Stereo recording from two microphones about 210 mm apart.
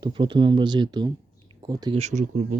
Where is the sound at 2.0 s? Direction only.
35° right (ahead or behind).